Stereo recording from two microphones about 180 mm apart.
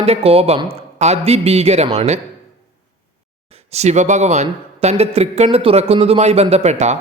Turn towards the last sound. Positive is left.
turn(degrees=-40)  # may be behind; listen again after turning